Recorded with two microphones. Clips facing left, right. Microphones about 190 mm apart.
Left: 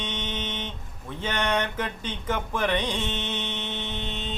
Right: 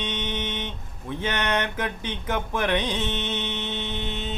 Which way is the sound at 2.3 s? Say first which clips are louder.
Right 1 dB; 15° right (ahead or behind).